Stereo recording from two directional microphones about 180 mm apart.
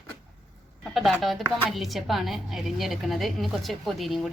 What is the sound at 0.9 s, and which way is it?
Speech, centre (ahead or behind).